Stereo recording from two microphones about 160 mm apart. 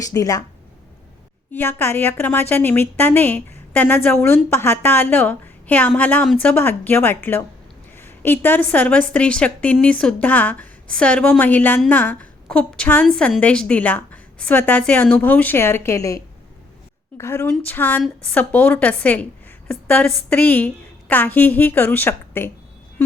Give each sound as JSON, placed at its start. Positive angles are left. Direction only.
{"t": 0.0, "sound": "speech", "side_deg": 20}
{"t": 1.5, "sound": "a woman's voice", "side_deg": 15}